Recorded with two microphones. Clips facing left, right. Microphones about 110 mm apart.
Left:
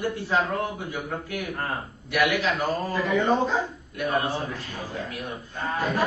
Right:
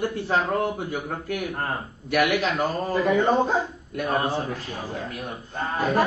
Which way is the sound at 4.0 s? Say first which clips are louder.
Right 1 dB; 40° right (ahead or behind).